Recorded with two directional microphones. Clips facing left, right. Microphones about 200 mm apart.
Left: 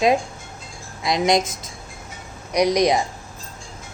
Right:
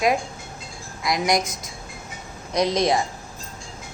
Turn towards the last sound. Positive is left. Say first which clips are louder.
# left 3 dB
turn(degrees=15)  # may be behind; listen again after turning